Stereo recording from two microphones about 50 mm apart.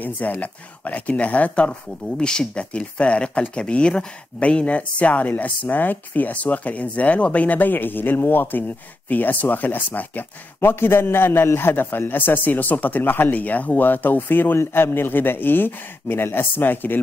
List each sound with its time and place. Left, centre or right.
0.0 s speech: left
1.5 s a man's voice: centre; by 17.0 s left